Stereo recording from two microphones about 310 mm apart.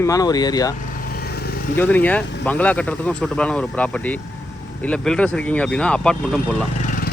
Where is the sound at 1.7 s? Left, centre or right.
Centre.